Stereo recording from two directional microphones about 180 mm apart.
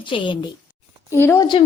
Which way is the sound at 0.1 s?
30° left (ahead or behind).